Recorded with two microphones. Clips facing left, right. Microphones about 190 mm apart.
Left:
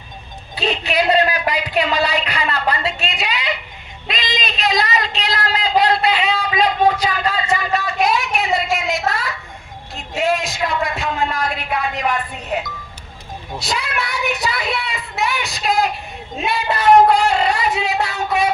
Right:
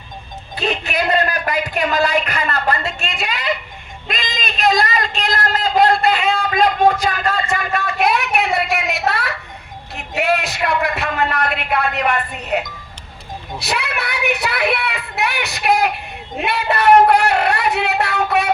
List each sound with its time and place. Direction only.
0.5 s a man's voice: 50° right (ahead or behind); by 18.5 s 65° right (ahead or behind)